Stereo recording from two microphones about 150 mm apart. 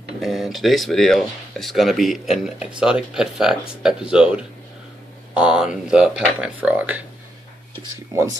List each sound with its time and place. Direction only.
0.2 s speech: centre (ahead or behind)
8.1 s speech: 20° right (ahead or behind)